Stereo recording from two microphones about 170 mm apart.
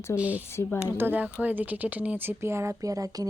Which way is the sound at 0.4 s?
15° left (ahead or behind).